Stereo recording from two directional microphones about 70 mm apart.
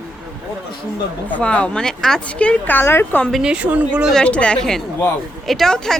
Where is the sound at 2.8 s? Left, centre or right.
Left.